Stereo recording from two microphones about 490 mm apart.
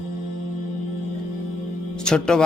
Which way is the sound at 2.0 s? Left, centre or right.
Centre.